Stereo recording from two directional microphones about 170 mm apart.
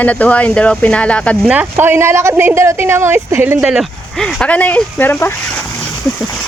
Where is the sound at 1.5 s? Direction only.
10° right (ahead or behind).